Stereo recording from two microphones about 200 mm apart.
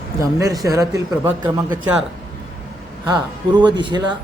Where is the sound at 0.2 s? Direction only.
15° right (ahead or behind).